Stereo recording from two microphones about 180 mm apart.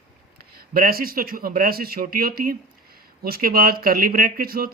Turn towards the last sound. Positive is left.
turn(degrees=-55)  # may be behind; listen again after turning